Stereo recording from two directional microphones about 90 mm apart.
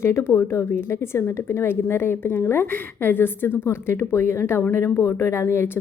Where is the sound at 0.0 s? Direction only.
30° left (ahead or behind).